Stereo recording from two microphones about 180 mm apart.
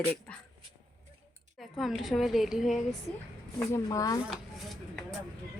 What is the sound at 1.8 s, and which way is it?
Speech, centre (ahead or behind).